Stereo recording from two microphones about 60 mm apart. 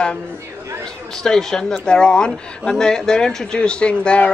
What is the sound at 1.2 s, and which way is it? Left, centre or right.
A man's voice, centre.